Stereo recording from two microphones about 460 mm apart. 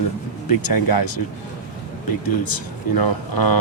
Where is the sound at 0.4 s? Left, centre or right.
Left.